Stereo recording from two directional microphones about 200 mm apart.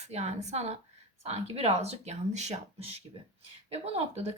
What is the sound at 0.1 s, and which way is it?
A woman's voice, 35° right (ahead or behind).